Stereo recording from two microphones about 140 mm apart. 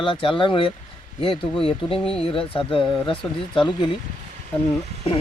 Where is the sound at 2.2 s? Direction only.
40° left (ahead or behind).